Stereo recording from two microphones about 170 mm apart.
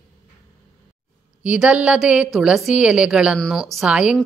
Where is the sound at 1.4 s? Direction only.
5° right (ahead or behind).